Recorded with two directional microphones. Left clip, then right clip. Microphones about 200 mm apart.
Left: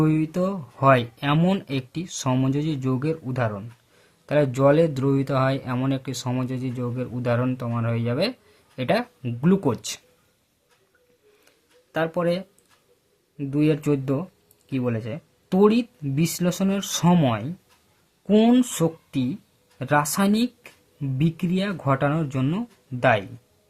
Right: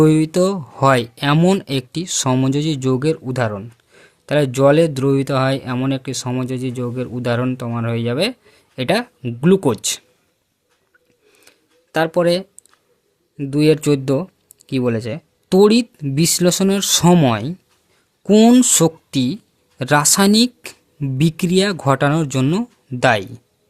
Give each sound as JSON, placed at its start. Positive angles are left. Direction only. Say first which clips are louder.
{"t": 0.0, "sound": "speech", "louder": "right 9 dB", "side_deg": -45}
{"t": 11.4, "sound": "a sound", "louder": "right 5 dB", "side_deg": -45}
{"t": 13.3, "sound": "speech", "louder": "right 8 dB", "side_deg": -40}